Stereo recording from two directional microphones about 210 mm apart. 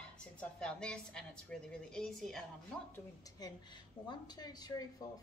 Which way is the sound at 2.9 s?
15° left (ahead or behind).